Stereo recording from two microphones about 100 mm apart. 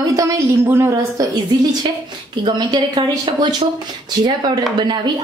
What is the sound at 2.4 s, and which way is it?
A woman's voice, 45° right (ahead or behind).